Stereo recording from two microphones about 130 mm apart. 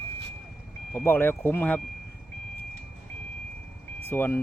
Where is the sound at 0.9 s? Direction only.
15° left (ahead or behind).